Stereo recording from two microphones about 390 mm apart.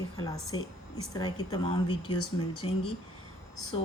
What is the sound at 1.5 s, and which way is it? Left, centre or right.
Speech, centre.